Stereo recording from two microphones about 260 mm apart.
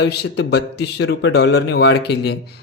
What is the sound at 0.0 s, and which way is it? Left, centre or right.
A man's voice, left.